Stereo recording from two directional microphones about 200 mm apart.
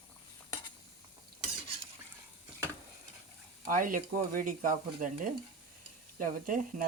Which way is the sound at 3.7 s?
40° right (ahead or behind).